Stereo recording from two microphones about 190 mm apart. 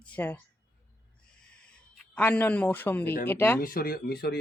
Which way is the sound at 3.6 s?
50° left (ahead or behind).